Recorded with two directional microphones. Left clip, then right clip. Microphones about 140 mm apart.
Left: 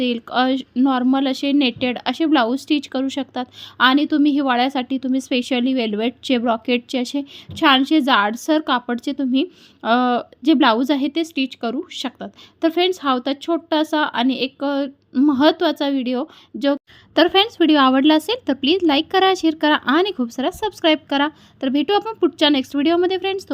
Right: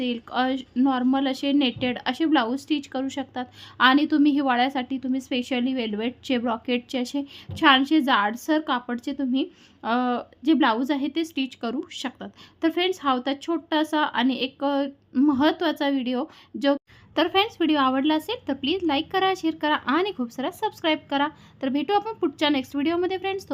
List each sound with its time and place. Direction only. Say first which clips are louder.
0.0 s speech: left 6 dB; 40° left (ahead or behind)